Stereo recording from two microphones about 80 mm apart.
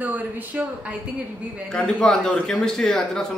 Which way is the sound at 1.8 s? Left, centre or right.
Centre.